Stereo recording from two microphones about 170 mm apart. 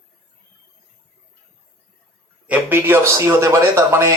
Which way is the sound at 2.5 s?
10° right (ahead or behind).